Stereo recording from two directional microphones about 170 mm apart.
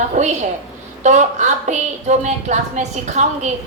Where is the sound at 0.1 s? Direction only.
45° right (ahead or behind).